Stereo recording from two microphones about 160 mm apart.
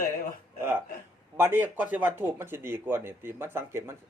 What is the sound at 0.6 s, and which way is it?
Speech, 15° right (ahead or behind).